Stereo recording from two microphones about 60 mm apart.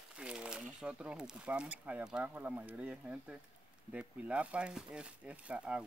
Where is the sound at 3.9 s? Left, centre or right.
Right.